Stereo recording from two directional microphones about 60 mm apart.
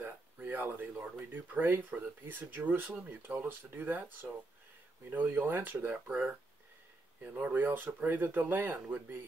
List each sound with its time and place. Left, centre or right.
0.0 s a sound: right
0.7 s speech: right
1.0 s speech: right
6.0 s speech: right